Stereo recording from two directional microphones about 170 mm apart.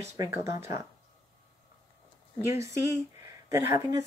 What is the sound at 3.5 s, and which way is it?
Speech, 20° right (ahead or behind).